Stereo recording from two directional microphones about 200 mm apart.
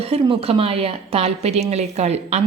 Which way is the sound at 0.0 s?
30° right (ahead or behind).